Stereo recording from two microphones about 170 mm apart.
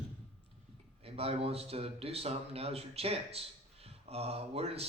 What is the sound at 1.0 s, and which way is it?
A man's voice, 35° right (ahead or behind).